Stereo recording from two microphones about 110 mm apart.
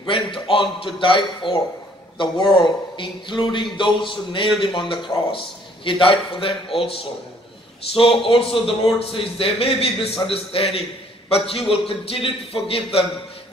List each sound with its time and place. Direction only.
0.1 s a man's voice: 50° left (ahead or behind)